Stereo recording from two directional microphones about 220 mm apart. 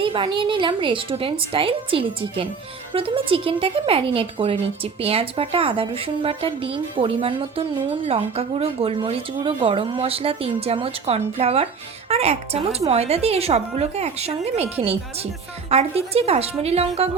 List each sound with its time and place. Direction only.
0.0 s a woman's voice: 25° right (ahead or behind)